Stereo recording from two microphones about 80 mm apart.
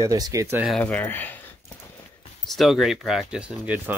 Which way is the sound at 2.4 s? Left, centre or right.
Centre.